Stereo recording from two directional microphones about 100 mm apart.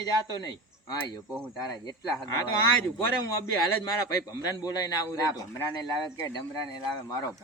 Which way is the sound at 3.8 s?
30° left (ahead or behind).